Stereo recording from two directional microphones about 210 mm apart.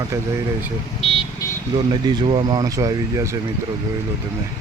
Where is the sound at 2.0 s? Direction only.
20° right (ahead or behind).